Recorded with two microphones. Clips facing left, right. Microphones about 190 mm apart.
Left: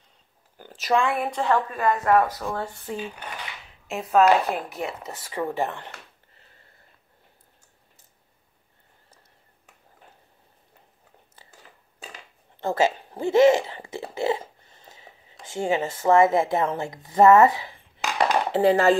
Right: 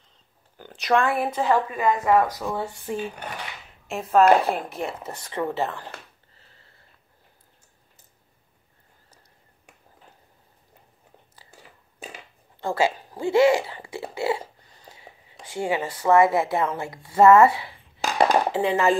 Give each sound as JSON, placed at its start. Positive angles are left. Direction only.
{"t": 0.6, "sound": "speech", "side_deg": 5}
{"t": 3.8, "sound": "speech", "side_deg": 0}
{"t": 12.5, "sound": "speech", "side_deg": 20}
{"t": 18.0, "sound": "a sound", "side_deg": -40}
{"t": 18.5, "sound": "speech", "side_deg": 35}